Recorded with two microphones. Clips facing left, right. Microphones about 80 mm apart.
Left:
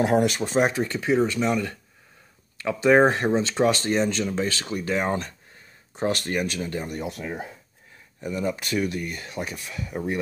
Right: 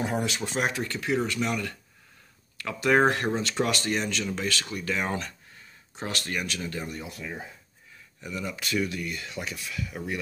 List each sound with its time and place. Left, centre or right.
0.0 s speech: left
0.3 s speech: left
7.0 s speech: left
8.2 s speech: left